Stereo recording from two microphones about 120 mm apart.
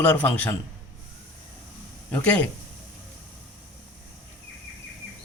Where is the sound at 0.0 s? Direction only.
15° left (ahead or behind).